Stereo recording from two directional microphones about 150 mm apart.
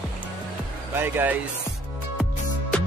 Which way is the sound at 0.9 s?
15° right (ahead or behind).